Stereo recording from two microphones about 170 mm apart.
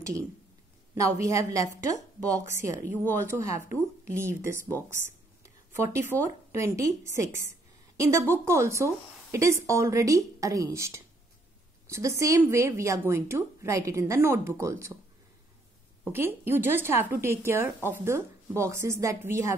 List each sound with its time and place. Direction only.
0.0 s a woman's voice: 15° right (ahead or behind)
5.8 s a woman's voice: 15° right (ahead or behind)
8.0 s a woman's voice: 15° right (ahead or behind)
16.1 s a woman's voice: 15° right (ahead or behind)